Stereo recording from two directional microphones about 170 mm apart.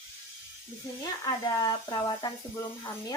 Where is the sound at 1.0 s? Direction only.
20° left (ahead or behind).